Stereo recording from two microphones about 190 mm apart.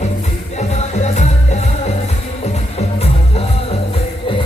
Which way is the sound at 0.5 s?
35° left (ahead or behind).